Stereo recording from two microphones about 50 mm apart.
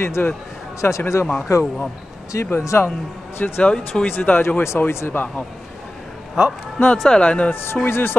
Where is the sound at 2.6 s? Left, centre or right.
Left.